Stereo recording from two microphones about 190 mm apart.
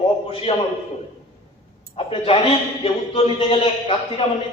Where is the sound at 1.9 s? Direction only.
30° left (ahead or behind).